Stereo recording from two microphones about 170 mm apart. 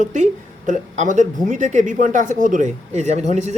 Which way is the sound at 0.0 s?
45° right (ahead or behind).